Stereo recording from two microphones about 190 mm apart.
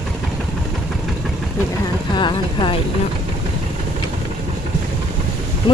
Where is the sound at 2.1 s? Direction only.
25° left (ahead or behind).